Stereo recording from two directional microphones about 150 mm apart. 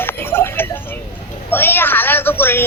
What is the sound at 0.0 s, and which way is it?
Tick-tock, 15° left (ahead or behind).